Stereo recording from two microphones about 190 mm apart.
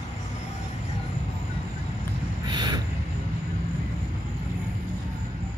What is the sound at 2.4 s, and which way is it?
Vehicle, 20° right (ahead or behind).